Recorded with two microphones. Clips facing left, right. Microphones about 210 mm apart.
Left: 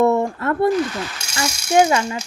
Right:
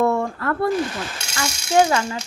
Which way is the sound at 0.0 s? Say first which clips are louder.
Left 3 dB; 20° left (ahead or behind).